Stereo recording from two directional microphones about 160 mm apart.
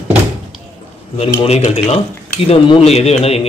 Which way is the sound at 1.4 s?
40° left (ahead or behind).